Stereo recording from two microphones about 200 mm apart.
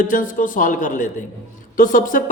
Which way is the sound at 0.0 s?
40° left (ahead or behind).